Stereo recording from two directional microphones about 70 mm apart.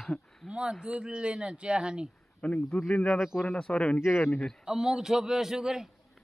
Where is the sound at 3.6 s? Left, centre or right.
Centre.